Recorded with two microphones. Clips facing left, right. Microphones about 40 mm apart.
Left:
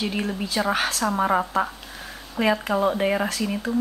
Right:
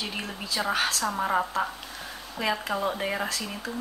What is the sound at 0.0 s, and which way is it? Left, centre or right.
Speech, left.